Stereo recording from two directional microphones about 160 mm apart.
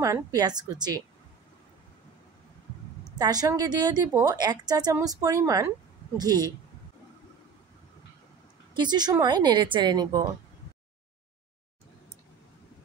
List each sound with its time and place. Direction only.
0.0 s a woman's voice: 20° right (ahead or behind)
3.2 s a woman's voice: 25° right (ahead or behind)
8.7 s a woman's voice: 25° right (ahead or behind)